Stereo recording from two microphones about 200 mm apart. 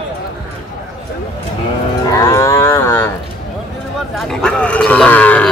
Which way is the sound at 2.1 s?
15° left (ahead or behind).